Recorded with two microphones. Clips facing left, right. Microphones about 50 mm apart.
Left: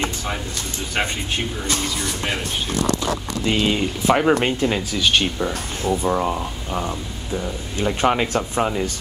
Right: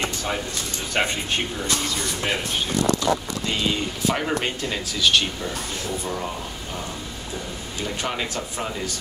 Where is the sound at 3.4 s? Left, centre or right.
Centre.